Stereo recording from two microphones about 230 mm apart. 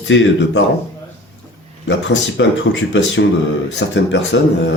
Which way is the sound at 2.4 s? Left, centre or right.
Left.